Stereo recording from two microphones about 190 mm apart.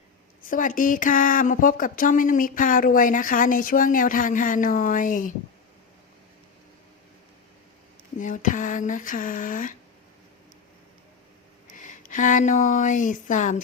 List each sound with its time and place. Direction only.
0.4 s speech: 45° left (ahead or behind)
8.2 s speech: 45° left (ahead or behind)
11.8 s speech: 40° left (ahead or behind)